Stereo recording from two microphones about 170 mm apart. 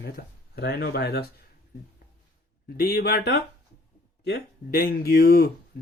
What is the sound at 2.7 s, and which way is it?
Speech, 65° left (ahead or behind).